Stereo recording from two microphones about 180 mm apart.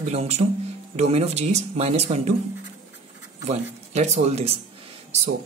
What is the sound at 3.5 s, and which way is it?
Speech, 40° right (ahead or behind).